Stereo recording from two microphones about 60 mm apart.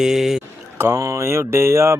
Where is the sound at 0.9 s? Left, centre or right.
Right.